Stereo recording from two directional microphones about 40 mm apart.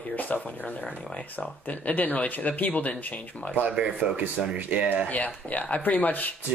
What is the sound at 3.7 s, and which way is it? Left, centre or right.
Speech, right.